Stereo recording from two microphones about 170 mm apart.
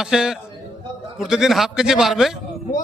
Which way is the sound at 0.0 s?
5° right (ahead or behind).